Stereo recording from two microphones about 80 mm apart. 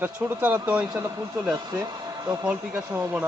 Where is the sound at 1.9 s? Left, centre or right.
Right.